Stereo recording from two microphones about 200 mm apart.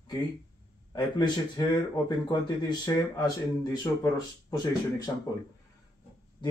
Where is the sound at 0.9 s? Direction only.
20° left (ahead or behind).